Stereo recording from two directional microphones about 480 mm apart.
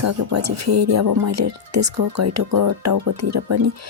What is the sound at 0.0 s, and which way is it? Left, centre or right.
Speech, right.